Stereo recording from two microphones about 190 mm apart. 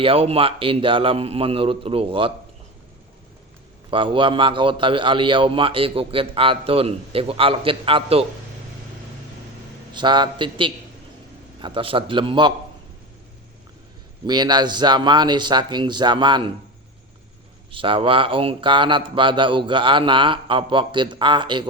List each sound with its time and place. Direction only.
0.0 s a man's voice: 30° right (ahead or behind)
3.9 s a man's voice: 25° right (ahead or behind)
9.9 s a man's voice: 25° right (ahead or behind)
14.3 s a man's voice: 20° right (ahead or behind)
17.7 s a man's voice: 25° right (ahead or behind)